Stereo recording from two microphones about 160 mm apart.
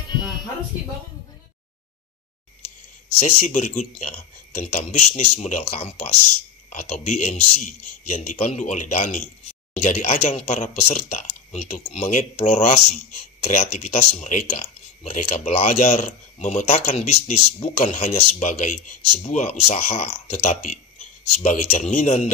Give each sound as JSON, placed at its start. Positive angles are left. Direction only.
{"t": 3.2, "sound": "speech", "side_deg": 45}